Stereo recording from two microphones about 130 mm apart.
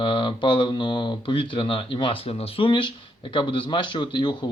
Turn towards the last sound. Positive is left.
turn(degrees=35)  # may be behind; listen again after turning